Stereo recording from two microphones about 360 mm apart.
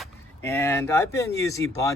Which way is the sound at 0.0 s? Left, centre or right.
Centre.